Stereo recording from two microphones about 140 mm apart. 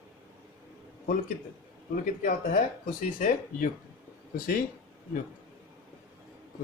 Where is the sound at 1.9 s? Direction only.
75° left (ahead or behind).